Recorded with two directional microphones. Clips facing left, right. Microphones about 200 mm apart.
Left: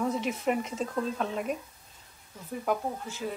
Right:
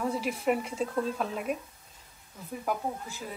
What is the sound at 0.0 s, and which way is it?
A woman's voice, 5° right (ahead or behind).